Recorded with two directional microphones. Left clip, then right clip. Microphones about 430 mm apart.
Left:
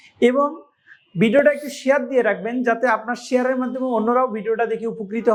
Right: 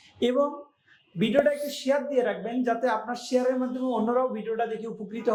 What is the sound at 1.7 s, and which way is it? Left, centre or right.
A man's voice, left.